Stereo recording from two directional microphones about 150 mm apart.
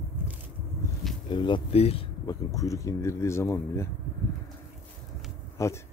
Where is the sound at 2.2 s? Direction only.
20° left (ahead or behind).